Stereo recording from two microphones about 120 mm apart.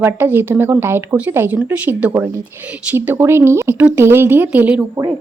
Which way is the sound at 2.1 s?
20° right (ahead or behind).